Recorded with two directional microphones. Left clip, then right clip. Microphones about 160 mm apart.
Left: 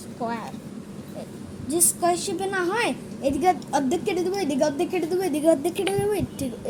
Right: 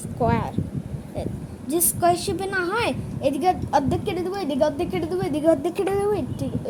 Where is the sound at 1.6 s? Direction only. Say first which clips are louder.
Right 3 dB; 10° right (ahead or behind).